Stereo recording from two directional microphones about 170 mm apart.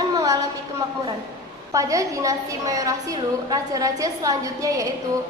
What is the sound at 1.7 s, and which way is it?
A woman's voice, 20° right (ahead or behind).